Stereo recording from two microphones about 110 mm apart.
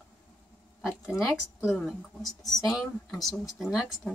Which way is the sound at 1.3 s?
5° right (ahead or behind).